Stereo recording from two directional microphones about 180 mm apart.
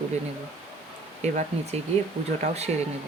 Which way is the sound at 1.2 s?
40° right (ahead or behind).